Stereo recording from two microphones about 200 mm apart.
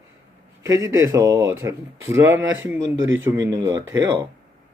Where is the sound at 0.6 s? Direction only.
15° right (ahead or behind).